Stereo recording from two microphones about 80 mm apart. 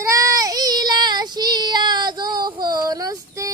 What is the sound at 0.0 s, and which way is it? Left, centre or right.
Child singing, right.